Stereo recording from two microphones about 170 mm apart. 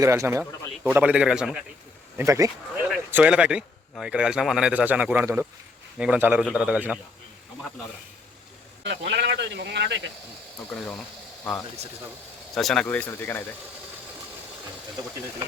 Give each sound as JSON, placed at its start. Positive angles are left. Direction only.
{"t": 0.0, "sound": "a man's voice", "side_deg": -15}
{"t": 2.1, "sound": "a man's voice", "side_deg": -15}
{"t": 8.9, "sound": "speech", "side_deg": -90}
{"t": 10.7, "sound": "speech", "side_deg": 0}
{"t": 12.5, "sound": "speech", "side_deg": 5}